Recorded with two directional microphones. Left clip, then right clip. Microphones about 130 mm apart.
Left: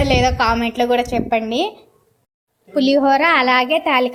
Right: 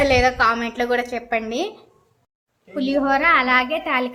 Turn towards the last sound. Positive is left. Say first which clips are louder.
# left 6 dB
turn(degrees=40)  # may be behind; listen again after turning